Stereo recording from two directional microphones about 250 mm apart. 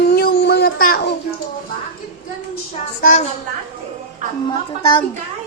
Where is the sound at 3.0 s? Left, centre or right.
Left.